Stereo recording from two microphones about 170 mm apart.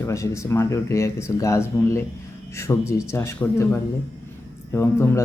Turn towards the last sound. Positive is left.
turn(degrees=15)  # may be behind; listen again after turning